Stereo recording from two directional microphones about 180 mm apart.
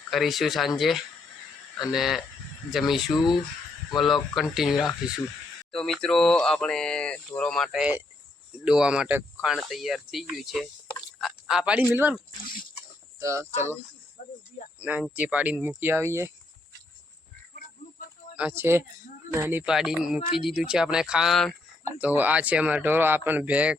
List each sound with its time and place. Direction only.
0.1 s speech: centre (ahead or behind)
14.2 s a sound: 45° left (ahead or behind)
14.8 s speech: 10° right (ahead or behind)
18.3 s speech: 10° right (ahead or behind)